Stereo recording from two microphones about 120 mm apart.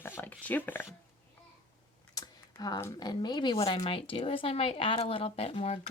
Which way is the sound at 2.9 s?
35° left (ahead or behind).